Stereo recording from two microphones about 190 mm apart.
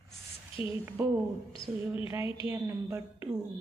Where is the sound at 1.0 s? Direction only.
15° right (ahead or behind).